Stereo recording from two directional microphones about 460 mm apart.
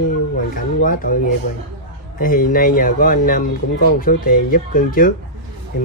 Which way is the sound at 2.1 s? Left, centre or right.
Centre.